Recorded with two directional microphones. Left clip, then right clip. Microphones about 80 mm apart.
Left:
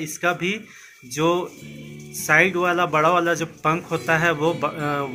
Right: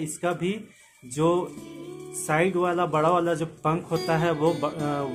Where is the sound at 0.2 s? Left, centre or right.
Centre.